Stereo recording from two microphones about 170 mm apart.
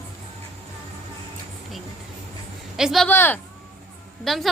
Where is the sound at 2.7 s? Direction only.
Centre (ahead or behind).